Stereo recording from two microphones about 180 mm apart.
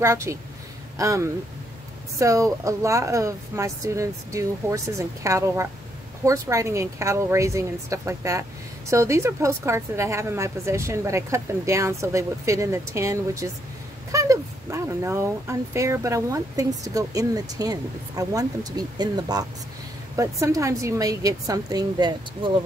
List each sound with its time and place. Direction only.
0.0 s a woman's voice: 15° right (ahead or behind)